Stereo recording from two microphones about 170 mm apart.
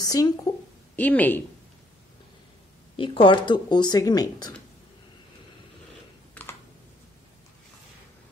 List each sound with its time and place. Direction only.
0.0 s a sound: 20° left (ahead or behind)
0.9 s speech: 10° left (ahead or behind)
3.0 s speech: 30° left (ahead or behind)